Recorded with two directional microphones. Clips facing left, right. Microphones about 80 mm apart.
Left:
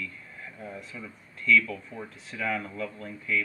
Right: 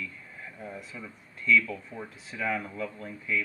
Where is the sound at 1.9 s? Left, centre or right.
Centre.